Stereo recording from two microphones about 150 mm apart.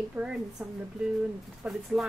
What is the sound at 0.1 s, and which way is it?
Speech, 5° right (ahead or behind).